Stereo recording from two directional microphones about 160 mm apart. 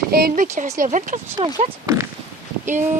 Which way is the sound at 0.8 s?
55° right (ahead or behind).